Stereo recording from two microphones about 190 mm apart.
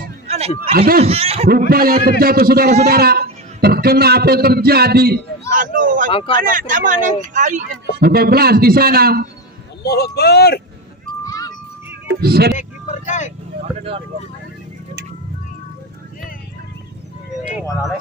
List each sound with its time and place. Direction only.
0.7 s a man's voice: 50° right (ahead or behind)
1.0 s speech: 30° right (ahead or behind)
1.7 s a man's voice: 50° right (ahead or behind)
5.5 s a man's voice: 45° right (ahead or behind)
6.0 s speech: 30° left (ahead or behind)
6.3 s a man's voice: 45° right (ahead or behind)
8.0 s a man's voice: 55° right (ahead or behind)
9.8 s speech: 55° left (ahead or behind)
11.2 s music: 20° left (ahead or behind)
12.1 s speech: 55° right (ahead or behind)
12.5 s speech: 40° left (ahead or behind)